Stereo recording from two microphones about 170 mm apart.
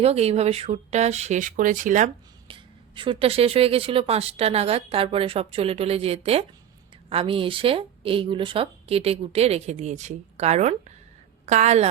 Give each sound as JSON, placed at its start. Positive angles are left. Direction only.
{"t": 0.0, "sound": "speech", "side_deg": -35}
{"t": 2.5, "sound": "speech", "side_deg": -30}